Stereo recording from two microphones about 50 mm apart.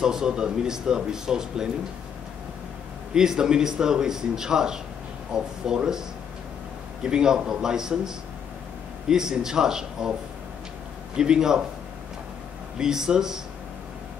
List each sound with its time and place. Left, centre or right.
0.0 s speech: centre
3.2 s speech: centre
9.1 s speech: centre
11.1 s speech: centre
12.7 s speech: centre